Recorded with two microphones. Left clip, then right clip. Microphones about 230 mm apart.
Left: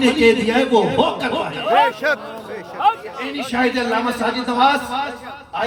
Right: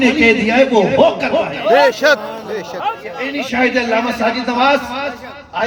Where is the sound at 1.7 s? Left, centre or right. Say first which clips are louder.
Right 5 dB; right.